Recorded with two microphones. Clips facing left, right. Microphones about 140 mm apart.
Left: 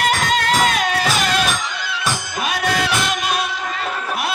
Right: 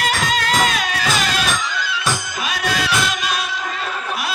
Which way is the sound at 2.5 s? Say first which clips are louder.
Left 1 dB; 55° left (ahead or behind).